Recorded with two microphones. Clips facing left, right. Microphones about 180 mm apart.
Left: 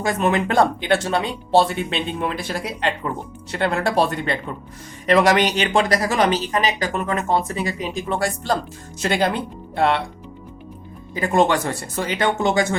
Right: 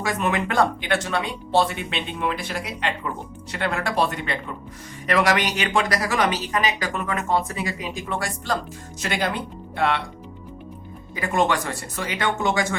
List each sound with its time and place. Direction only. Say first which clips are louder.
0.0 s speech: left 4 dB; 30° left (ahead or behind)
11.1 s speech: left 4 dB; 30° left (ahead or behind)